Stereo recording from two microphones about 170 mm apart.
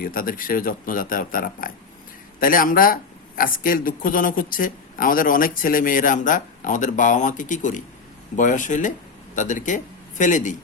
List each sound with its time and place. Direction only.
0.0 s a man's voice: 55° left (ahead or behind)